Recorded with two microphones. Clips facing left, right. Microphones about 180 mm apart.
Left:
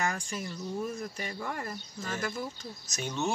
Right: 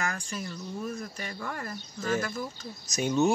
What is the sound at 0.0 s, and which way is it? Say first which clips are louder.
Speech: left 1 dB; 25° left (ahead or behind).